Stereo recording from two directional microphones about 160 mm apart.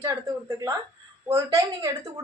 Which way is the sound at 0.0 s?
20° right (ahead or behind).